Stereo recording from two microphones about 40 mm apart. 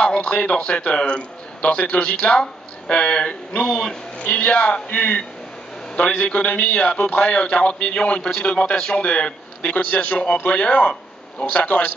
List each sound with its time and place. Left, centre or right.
0.0 s a man's voice: left
4.2 s speech: left
7.2 s a man's voice: left
9.6 s speech: left
10.6 s speech: left